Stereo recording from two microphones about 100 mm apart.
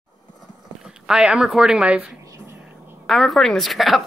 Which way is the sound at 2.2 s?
30° right (ahead or behind).